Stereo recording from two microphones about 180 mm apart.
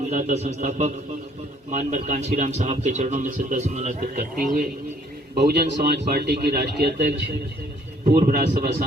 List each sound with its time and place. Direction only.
0.0 s speech: 40° right (ahead or behind)
5.4 s speech: 65° right (ahead or behind)
8.0 s a man's voice: 50° right (ahead or behind)